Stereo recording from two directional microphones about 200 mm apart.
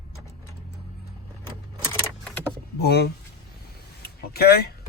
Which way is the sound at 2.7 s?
55° left (ahead or behind).